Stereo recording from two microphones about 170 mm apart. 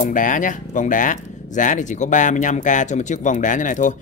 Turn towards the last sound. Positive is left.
turn(degrees=50)  # may be behind; listen again after turning